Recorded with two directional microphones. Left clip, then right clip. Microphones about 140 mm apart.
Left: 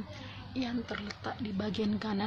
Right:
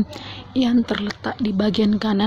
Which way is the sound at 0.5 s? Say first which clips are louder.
Right 16 dB; 60° right (ahead or behind).